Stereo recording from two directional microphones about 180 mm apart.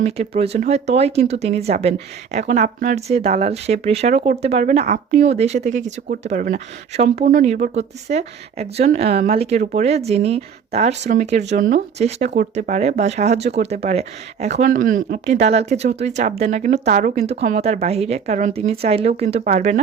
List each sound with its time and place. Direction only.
0.0 s speech: 35° right (ahead or behind)